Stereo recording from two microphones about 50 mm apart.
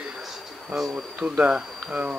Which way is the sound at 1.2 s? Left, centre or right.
Right.